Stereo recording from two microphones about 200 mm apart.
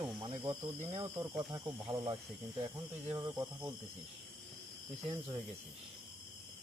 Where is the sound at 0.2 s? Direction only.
25° right (ahead or behind).